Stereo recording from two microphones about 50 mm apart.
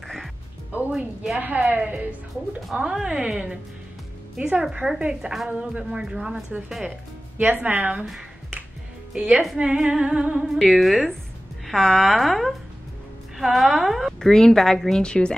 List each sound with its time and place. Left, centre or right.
0.9 s speech: centre
1.6 s speech: right
2.8 s speech: centre
4.7 s speech: centre
7.3 s a woman's voice: right
7.9 s speech: centre
10.7 s speech: centre
11.7 s a woman's voice: centre
12.2 s speech: centre
14.2 s a woman's voice: centre